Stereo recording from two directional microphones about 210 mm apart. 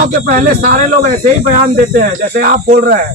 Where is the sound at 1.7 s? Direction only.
40° right (ahead or behind).